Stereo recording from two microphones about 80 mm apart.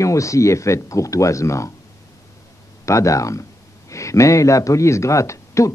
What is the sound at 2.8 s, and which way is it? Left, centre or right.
Speech, left.